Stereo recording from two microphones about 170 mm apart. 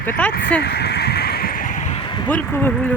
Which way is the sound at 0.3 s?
90° left.